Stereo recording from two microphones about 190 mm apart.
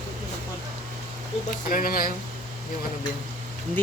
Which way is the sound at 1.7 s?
50° left (ahead or behind).